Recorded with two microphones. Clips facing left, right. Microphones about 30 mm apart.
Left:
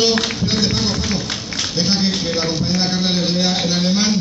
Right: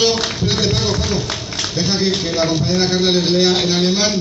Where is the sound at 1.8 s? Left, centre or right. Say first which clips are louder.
Right 1 dB; left.